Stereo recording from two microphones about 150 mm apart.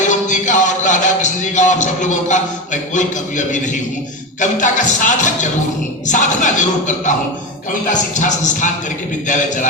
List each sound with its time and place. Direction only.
0.0 s music: 55° left (ahead or behind)
2.9 s speech: 55° left (ahead or behind)
8.1 s speech: 55° left (ahead or behind)